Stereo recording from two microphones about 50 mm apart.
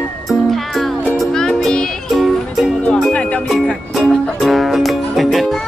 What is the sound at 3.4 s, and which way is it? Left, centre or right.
Music, centre.